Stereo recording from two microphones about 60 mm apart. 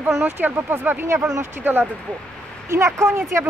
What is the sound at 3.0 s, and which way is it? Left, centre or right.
Speech, right.